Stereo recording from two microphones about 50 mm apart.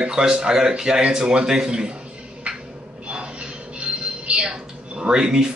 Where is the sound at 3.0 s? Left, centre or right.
Right.